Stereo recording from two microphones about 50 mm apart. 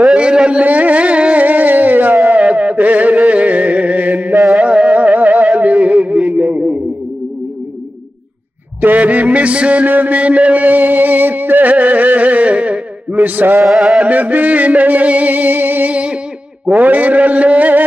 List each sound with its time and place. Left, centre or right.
0.0 s carnatic music: centre; by 2.1 s right
2.2 s music: right
4.6 s a sound: right
8.8 s music: right
13.7 s music: centre
14.0 s music: right
15.9 s music: right
16.7 s a sound: right